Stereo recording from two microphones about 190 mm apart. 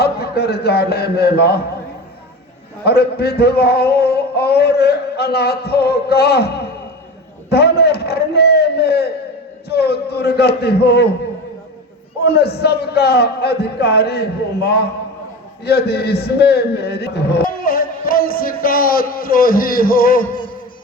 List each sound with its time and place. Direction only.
0.0 s a man's voice: 55° left (ahead or behind)
2.8 s speech: 55° left (ahead or behind)
12.2 s a man's voice: 55° left (ahead or behind)